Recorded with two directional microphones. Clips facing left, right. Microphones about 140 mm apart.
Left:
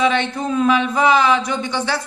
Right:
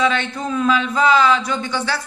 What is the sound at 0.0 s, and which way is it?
A woman's voice, 20° left (ahead or behind).